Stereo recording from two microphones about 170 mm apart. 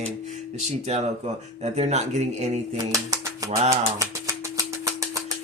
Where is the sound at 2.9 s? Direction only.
20° right (ahead or behind).